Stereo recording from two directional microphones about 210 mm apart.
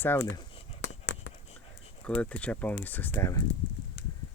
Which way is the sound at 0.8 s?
60° left (ahead or behind).